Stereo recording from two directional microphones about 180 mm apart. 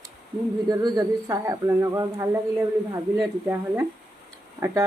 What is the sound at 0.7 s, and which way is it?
Speech, 25° right (ahead or behind).